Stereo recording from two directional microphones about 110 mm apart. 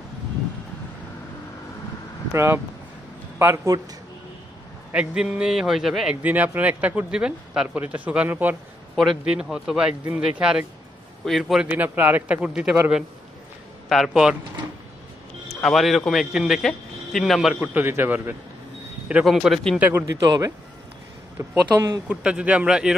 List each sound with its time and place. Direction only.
2.3 s a man's voice: 20° right (ahead or behind)
4.9 s a man's voice: 10° right (ahead or behind)
6.2 s speech: 15° right (ahead or behind)
8.9 s a man's voice: centre (ahead or behind)
11.6 s speech: 15° right (ahead or behind)
13.8 s a man's voice: centre (ahead or behind)
15.4 s a man's voice: centre (ahead or behind)
17.6 s speech: 20° right (ahead or behind)
19.2 s a man's voice: centre (ahead or behind)
19.8 s speech: 15° right (ahead or behind)
20.2 s speech: 30° right (ahead or behind)
22.0 s speech: 10° right (ahead or behind)